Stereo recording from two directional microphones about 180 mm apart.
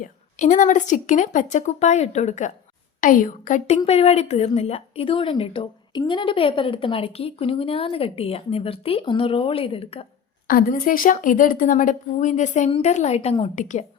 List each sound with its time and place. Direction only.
0.0 s a woman's voice: 40° left (ahead or behind)
10.4 s a woman's voice: 50° left (ahead or behind); by 13.5 s 35° left (ahead or behind)
13.6 s a woman's voice: 45° left (ahead or behind)